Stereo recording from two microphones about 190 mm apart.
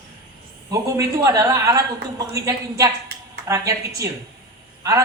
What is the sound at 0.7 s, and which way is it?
A man's voice, 15° right (ahead or behind).